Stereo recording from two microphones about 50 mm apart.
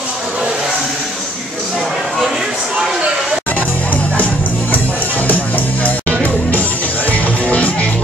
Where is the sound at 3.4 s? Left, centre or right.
Left.